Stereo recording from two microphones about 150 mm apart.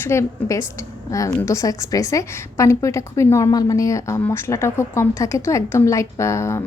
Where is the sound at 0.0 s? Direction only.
15° left (ahead or behind).